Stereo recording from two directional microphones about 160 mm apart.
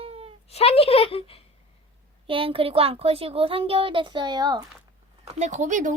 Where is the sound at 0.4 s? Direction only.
40° left (ahead or behind).